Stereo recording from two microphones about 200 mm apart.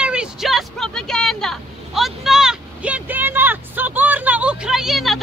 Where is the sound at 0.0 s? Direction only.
5° right (ahead or behind).